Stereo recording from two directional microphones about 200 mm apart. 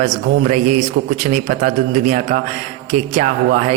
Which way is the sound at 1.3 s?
35° right (ahead or behind).